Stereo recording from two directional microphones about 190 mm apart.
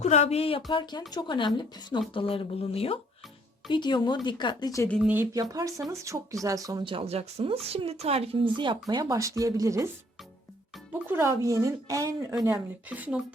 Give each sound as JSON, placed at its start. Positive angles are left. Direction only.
{"t": 0.0, "sound": "speech", "side_deg": 35}
{"t": 4.9, "sound": "speech", "side_deg": 0}
{"t": 5.1, "sound": "speech", "side_deg": -15}
{"t": 11.1, "sound": "speech", "side_deg": -15}
{"t": 12.9, "sound": "speech", "side_deg": -5}